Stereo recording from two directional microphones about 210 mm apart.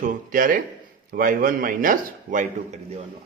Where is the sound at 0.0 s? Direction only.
40° right (ahead or behind).